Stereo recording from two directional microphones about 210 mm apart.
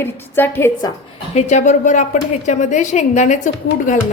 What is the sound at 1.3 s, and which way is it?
A woman's voice, 35° left (ahead or behind).